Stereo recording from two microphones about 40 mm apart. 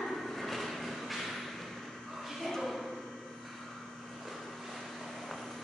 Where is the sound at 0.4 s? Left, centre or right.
Centre.